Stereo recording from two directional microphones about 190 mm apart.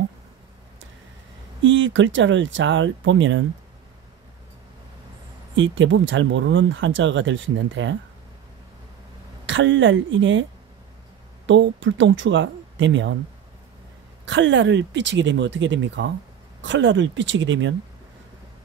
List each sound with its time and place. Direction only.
1.6 s speech: 80° right
5.6 s speech: 80° right
9.5 s speech: 80° right
11.4 s speech: 75° right (ahead or behind)
14.2 s speech: 75° right (ahead or behind)